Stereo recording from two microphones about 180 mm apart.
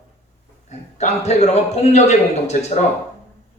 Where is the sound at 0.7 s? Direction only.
40° left (ahead or behind).